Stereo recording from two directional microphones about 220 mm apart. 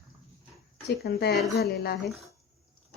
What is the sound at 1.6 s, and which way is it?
Speech, 45° left (ahead or behind).